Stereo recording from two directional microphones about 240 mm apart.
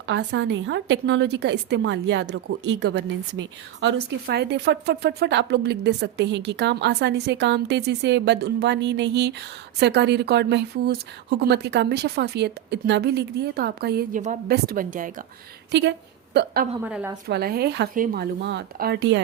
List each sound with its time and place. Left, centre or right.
0.0 s a woman's voice: right
15.7 s a woman's voice: right
16.8 s a woman's voice: centre
17.2 s speech: right